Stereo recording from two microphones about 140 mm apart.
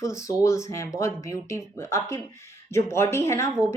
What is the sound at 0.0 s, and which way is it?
Speech, 20° left (ahead or behind).